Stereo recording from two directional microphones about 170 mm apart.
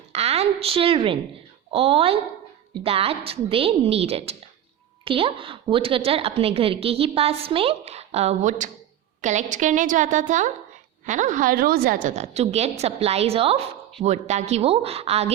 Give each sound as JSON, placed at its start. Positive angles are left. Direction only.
{"t": 0.1, "sound": "a woman's voice", "side_deg": -35}